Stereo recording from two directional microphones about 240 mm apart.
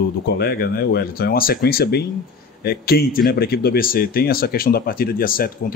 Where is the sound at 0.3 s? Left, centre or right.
Left.